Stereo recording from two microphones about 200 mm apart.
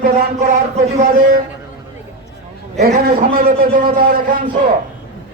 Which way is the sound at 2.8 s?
45° right (ahead or behind).